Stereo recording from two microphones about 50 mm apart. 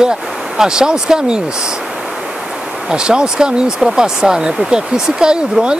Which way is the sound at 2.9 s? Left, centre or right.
Centre.